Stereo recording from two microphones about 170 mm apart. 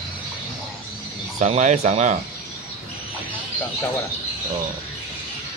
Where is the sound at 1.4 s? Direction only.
45° right (ahead or behind).